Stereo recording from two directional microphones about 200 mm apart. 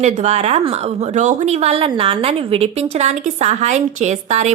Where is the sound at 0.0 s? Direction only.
35° right (ahead or behind).